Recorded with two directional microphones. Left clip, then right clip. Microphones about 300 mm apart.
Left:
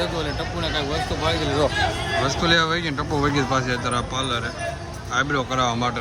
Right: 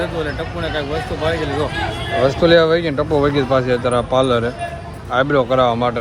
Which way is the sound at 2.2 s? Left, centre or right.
Centre.